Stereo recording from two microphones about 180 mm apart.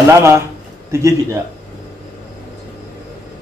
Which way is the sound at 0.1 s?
15° right (ahead or behind).